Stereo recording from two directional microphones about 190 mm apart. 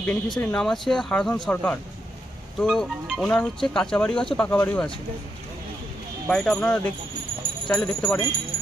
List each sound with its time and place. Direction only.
0.0 s speech: 10° left (ahead or behind)
6.2 s speech: 5° left (ahead or behind)